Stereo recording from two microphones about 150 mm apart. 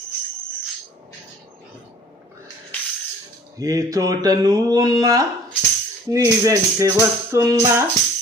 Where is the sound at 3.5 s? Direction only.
25° right (ahead or behind).